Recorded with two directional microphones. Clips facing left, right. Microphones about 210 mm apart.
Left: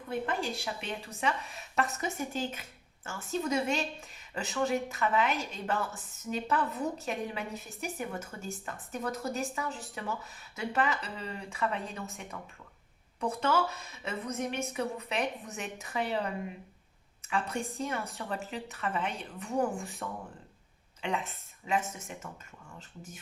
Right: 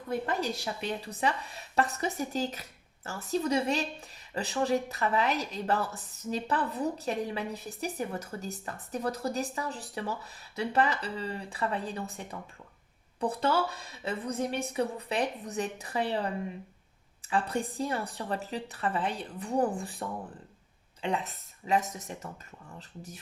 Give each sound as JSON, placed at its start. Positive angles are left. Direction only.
{"t": 0.1, "sound": "a woman's voice", "side_deg": -40}